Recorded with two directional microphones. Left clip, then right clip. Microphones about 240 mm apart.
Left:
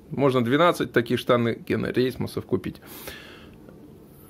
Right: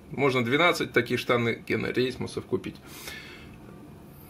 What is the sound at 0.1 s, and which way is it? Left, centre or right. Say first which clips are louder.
Speech: left 3 dB; left.